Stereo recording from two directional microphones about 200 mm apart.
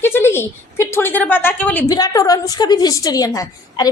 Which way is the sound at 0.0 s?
10° left (ahead or behind).